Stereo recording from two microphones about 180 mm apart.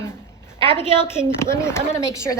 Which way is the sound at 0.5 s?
30° right (ahead or behind).